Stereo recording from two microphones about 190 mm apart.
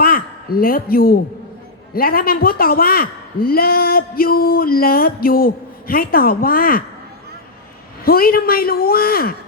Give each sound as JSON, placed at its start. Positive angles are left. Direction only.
{"t": 0.0, "sound": "a man's voice", "side_deg": 50}
{"t": 8.0, "sound": "a woman's voice", "side_deg": 50}